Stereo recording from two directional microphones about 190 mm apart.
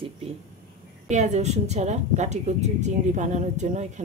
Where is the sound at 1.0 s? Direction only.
40° right (ahead or behind).